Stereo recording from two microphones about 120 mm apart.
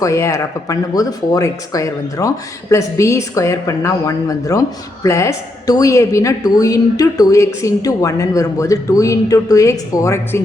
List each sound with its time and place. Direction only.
0.0 s a woman's voice: 25° left (ahead or behind)